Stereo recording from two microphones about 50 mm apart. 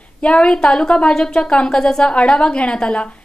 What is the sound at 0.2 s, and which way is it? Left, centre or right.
A woman's voice, left.